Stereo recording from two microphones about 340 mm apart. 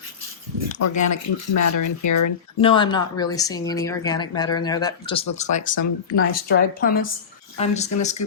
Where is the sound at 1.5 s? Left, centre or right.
Left.